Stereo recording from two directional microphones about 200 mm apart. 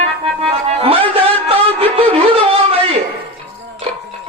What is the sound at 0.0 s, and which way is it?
Music, 30° right (ahead or behind).